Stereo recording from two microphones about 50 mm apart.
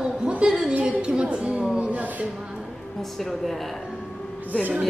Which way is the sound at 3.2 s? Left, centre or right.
Centre.